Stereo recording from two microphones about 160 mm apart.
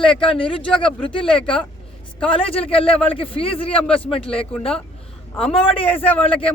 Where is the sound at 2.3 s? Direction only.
35° left (ahead or behind).